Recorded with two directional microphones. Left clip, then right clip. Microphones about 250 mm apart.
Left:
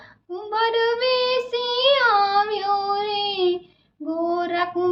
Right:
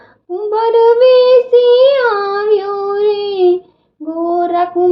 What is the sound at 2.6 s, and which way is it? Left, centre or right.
Child singing, left.